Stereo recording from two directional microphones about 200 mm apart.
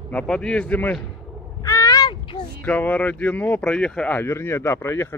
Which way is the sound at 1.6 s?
15° left (ahead or behind).